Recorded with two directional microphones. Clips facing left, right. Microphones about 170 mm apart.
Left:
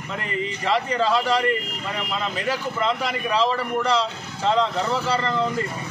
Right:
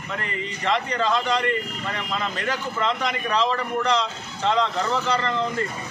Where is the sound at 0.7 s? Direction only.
5° left (ahead or behind).